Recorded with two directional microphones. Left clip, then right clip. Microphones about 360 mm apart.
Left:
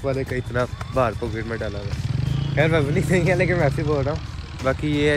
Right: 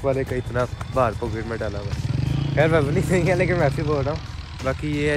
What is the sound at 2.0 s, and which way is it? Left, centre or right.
Wild animals, right.